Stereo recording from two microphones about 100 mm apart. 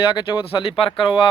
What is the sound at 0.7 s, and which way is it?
Speech, 60° left (ahead or behind).